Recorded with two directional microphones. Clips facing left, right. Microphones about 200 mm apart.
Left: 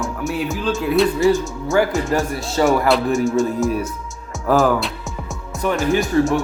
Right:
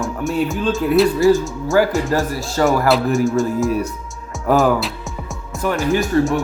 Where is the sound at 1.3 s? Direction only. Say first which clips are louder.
Right 3 dB; centre (ahead or behind).